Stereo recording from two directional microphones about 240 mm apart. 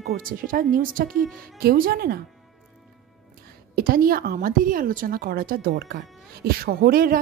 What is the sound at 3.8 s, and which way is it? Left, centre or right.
Speech, right.